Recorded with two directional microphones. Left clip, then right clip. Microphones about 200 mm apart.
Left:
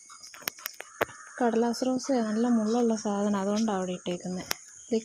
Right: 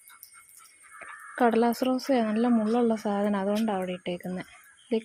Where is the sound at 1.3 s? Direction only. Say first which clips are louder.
Right 4 dB; 25° right (ahead or behind).